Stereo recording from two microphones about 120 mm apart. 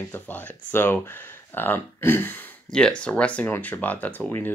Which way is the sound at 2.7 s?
5° left (ahead or behind).